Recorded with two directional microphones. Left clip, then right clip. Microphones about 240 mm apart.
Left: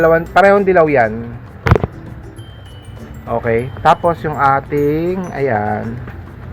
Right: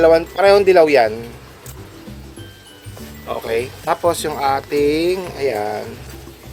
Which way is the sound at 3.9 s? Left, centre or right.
Right.